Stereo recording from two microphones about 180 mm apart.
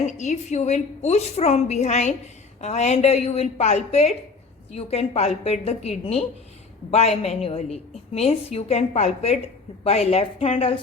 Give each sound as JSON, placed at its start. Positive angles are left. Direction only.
{"t": 0.0, "sound": "a woman's voice", "side_deg": 40}